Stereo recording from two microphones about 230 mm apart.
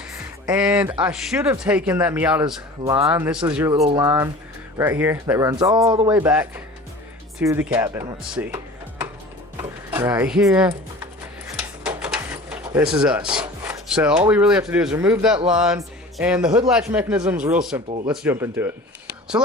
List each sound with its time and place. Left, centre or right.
0.4 s speech: centre
6.1 s speech: centre